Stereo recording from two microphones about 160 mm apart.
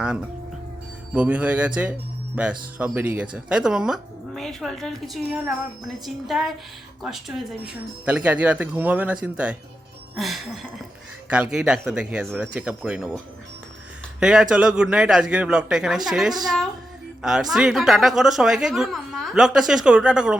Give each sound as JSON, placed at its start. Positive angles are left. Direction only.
{"t": 1.1, "sound": "a woman's voice", "side_deg": -10}